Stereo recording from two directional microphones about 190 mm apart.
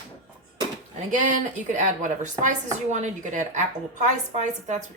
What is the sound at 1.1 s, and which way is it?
A woman's voice, 40° right (ahead or behind).